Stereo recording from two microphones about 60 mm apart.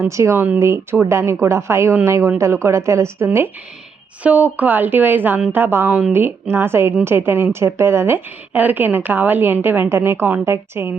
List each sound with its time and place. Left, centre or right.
0.1 s a woman's voice: right
0.3 s speech: right
0.6 s a woman's voice: right
4.2 s a woman's voice: right
8.5 s a woman's voice: right